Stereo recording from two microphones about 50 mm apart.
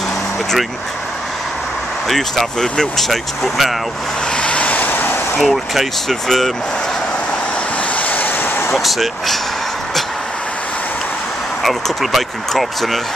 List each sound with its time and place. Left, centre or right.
2.0 s speech: centre
4.3 s vehicle: left
4.8 s vehicle: left
5.4 s speech: centre
7.9 s vehicle: left
8.7 s speech: centre
11.6 s speech: centre